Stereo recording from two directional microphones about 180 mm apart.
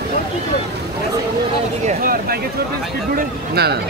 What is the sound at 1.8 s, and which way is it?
Speech, 50° right (ahead or behind).